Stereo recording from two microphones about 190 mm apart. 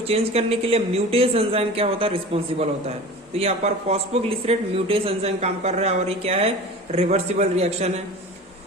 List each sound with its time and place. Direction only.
0.1 s speech: 30° right (ahead or behind)